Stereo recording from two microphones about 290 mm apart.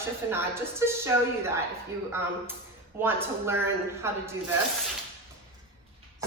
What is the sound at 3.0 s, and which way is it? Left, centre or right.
A woman's voice, centre.